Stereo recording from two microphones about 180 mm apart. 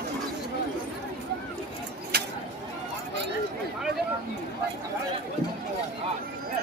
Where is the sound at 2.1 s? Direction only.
65° right (ahead or behind).